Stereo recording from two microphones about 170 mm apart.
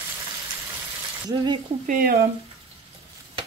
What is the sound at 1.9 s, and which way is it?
Speech, 60° right (ahead or behind).